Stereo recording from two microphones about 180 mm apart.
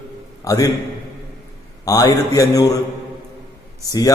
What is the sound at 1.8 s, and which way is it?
Speech, 20° left (ahead or behind).